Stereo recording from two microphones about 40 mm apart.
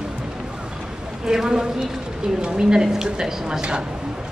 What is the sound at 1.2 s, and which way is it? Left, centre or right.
A woman's voice, centre.